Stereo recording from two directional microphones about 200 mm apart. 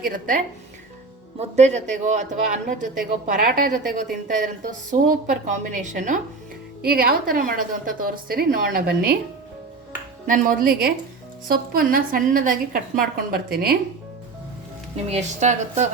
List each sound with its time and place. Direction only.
0.0 s a woman's voice: 40° right (ahead or behind)
10.2 s a woman's voice: 40° right (ahead or behind)
15.1 s a woman's voice: 35° right (ahead or behind)